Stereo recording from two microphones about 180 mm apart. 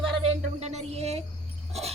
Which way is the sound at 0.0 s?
30° right (ahead or behind).